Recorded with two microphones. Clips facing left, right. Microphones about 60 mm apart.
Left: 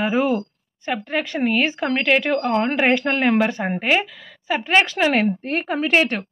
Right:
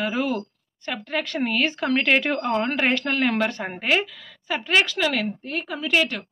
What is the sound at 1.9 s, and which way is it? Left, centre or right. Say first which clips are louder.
Speech: left 3 dB; centre.